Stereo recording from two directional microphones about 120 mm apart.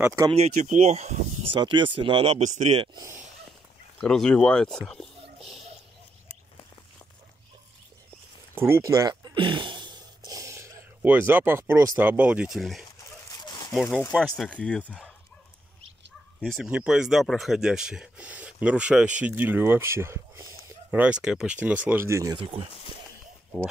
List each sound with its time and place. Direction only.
0.6 s speech: 75° right (ahead or behind)
1.5 s speech: 45° right (ahead or behind); by 2.8 s 75° right (ahead or behind)
4.0 s speech: 5° left (ahead or behind)
8.5 s a sound: 20° right (ahead or behind)
12.0 s speech: 15° right (ahead or behind)
13.3 s a sound: 35° left (ahead or behind)
13.7 s speech: 5° left (ahead or behind)
16.3 s speech: centre (ahead or behind); by 20.7 s 25° right (ahead or behind)
20.9 s speech: 10° right (ahead or behind)
22.0 s speech: 25° right (ahead or behind)
22.4 s speech: 55° right (ahead or behind)